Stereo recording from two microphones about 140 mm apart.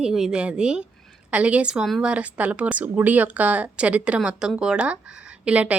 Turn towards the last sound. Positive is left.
turn(degrees=-10)  # may be behind; listen again after turning